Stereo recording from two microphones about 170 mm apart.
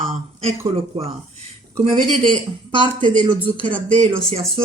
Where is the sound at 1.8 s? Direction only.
35° right (ahead or behind).